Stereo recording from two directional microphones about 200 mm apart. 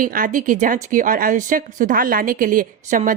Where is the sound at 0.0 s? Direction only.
40° right (ahead or behind).